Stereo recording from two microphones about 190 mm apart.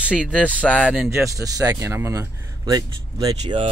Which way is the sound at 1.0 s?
15° right (ahead or behind).